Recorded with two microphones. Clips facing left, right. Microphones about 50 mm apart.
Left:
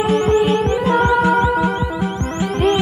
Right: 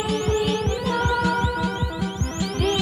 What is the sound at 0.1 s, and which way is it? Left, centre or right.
Music, left.